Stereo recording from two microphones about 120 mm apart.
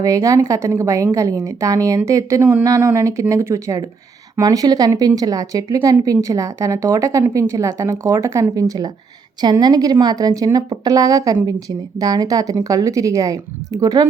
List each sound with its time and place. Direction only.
0.0 s a woman's voice: 30° right (ahead or behind)